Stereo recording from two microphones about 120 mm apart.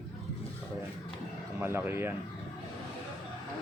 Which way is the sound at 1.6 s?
20° right (ahead or behind).